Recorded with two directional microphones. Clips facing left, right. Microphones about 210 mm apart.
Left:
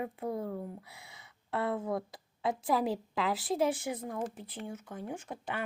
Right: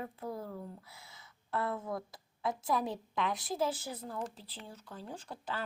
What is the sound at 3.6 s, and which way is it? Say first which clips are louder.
Speech: left 3 dB; 25° left (ahead or behind).